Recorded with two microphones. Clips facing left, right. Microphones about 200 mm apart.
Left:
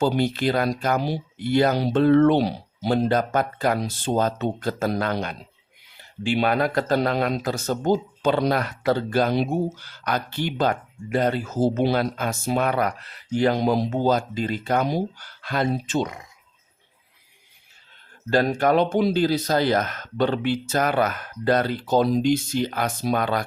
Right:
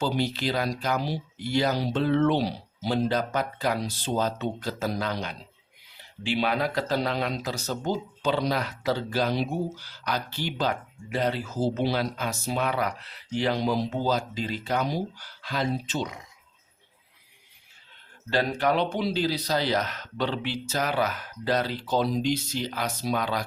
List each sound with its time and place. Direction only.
0.0 s speech: 55° left (ahead or behind)
18.3 s speech: 45° left (ahead or behind)